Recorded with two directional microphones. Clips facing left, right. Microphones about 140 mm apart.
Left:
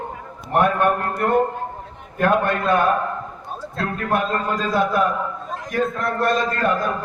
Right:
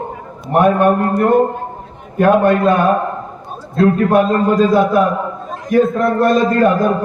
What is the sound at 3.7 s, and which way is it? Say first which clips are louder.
A man's voice: right 11 dB; 15° right (ahead or behind).